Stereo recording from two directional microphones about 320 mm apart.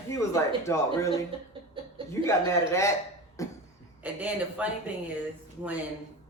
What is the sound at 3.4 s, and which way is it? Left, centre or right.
Cough, centre.